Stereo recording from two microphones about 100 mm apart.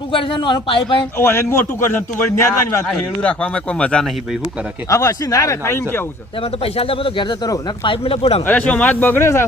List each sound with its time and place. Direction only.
0.1 s a man's voice: 55° left (ahead or behind)
1.2 s speech: 25° left (ahead or behind)
2.8 s a man's voice: 10° left (ahead or behind)
4.9 s speech: 35° left (ahead or behind)
6.6 s a man's voice: 75° left (ahead or behind); by 7.5 s 50° left (ahead or behind)
7.9 s speech: 70° left (ahead or behind)
8.4 s speech: 15° left (ahead or behind)